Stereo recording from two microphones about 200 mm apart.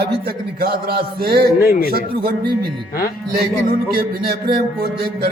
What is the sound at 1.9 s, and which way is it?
Music, 50° right (ahead or behind).